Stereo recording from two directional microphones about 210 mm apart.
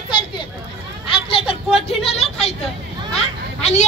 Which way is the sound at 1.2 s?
25° left (ahead or behind).